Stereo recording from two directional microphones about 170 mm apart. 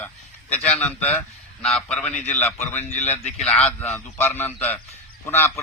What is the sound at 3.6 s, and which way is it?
Speech, 40° left (ahead or behind).